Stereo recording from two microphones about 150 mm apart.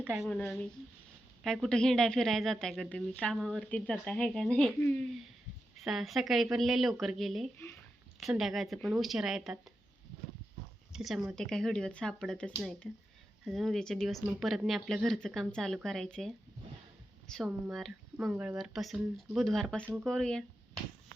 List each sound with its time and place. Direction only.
0.2 s speech: 5° left (ahead or behind)
5.8 s speech: centre (ahead or behind)
10.9 s speech: centre (ahead or behind)
19.8 s speech: 10° right (ahead or behind)
20.1 s speech: 5° left (ahead or behind)